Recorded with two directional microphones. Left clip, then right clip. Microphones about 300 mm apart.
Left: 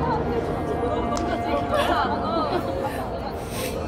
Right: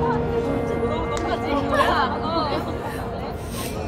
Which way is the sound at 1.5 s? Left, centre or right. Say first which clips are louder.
Right 3 dB; right.